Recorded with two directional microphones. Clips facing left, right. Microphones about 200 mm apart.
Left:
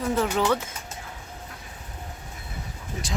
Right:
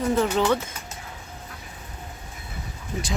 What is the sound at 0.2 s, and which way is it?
Speech, 5° left (ahead or behind).